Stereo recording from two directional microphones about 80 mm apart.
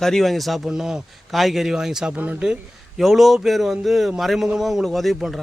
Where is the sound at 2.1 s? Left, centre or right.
Centre.